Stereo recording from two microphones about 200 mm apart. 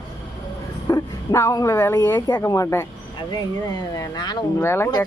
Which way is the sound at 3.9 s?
20° left (ahead or behind).